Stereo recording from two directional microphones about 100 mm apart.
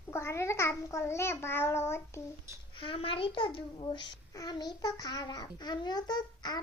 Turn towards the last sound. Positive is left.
turn(degrees=45)  # may be behind; listen again after turning